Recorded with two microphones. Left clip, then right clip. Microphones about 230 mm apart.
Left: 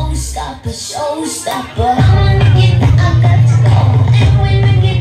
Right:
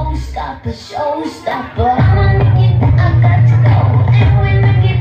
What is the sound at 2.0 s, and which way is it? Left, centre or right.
Music, left.